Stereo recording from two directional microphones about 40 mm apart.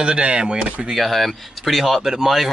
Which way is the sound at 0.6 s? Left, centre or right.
Right.